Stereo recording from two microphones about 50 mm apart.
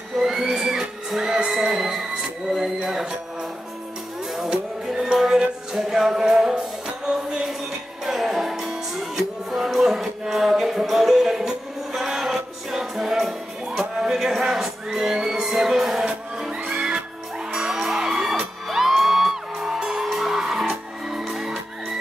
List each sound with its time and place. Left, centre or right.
0.2 s music: centre
2.5 s a sound: centre
4.4 s music: centre